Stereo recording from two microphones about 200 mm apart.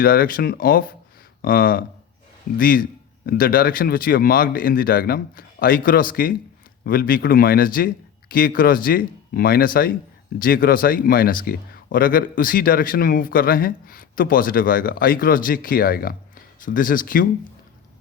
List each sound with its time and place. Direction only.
0.0 s speech: 45° left (ahead or behind)